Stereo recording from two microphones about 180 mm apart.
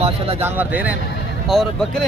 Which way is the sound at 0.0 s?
35° right (ahead or behind).